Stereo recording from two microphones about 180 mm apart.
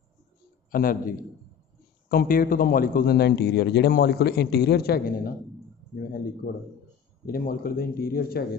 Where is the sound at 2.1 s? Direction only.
55° left (ahead or behind).